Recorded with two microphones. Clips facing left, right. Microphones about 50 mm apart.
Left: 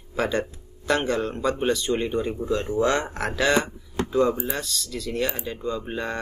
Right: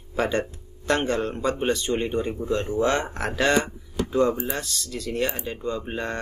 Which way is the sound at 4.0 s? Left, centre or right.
Left.